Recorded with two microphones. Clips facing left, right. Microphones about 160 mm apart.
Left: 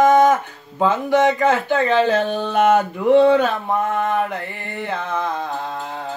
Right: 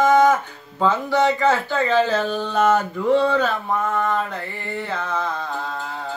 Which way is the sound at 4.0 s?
60° left (ahead or behind).